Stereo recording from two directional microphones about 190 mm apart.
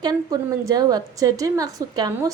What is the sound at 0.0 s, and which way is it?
A woman's voice, 20° right (ahead or behind).